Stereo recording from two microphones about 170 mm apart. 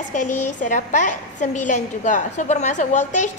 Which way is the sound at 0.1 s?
45° left (ahead or behind).